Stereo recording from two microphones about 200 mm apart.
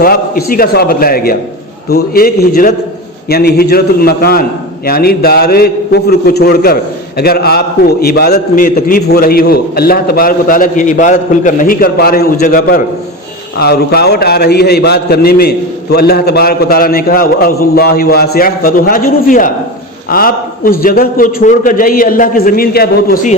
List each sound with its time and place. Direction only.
0.0 s a man's voice: 50° left (ahead or behind)